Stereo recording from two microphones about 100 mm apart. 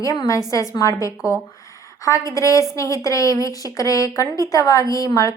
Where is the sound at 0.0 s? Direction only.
35° left (ahead or behind).